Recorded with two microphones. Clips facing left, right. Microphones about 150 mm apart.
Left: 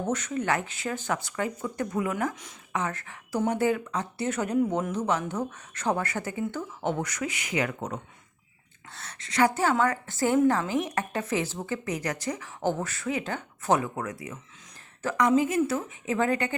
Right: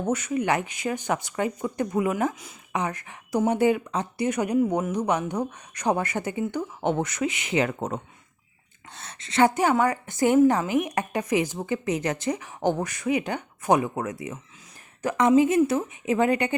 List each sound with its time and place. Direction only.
0.1 s a woman's voice: 10° right (ahead or behind)